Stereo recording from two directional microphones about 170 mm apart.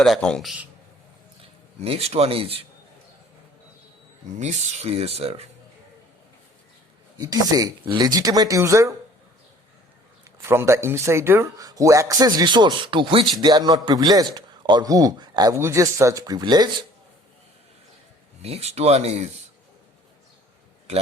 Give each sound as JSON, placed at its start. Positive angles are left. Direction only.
{"t": 0.0, "sound": "speech", "side_deg": 5}
{"t": 1.8, "sound": "speech", "side_deg": -35}
{"t": 4.4, "sound": "speech", "side_deg": -40}
{"t": 7.2, "sound": "a man's voice", "side_deg": -20}
{"t": 10.4, "sound": "a man's voice", "side_deg": -15}
{"t": 18.4, "sound": "speech", "side_deg": -35}